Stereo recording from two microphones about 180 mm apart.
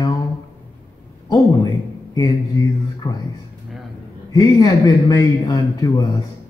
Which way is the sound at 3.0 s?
15° left (ahead or behind).